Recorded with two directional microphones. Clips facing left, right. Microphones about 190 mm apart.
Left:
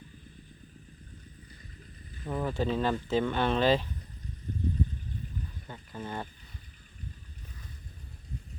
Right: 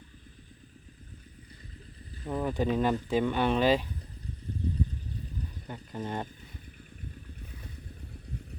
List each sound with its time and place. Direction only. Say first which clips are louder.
2.2 s speech: right 1 dB; 10° right (ahead or behind)
5.6 s pour: right 5 dB; 15° right (ahead or behind)